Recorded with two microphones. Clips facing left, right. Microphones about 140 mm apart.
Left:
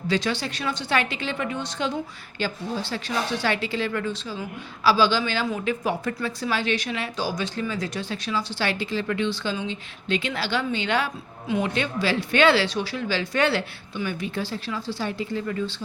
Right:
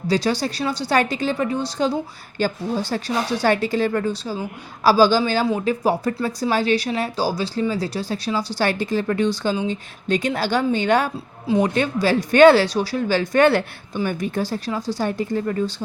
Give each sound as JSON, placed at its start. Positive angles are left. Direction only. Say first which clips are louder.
{"t": 0.1, "sound": "speech", "louder": "right 5 dB", "side_deg": -40}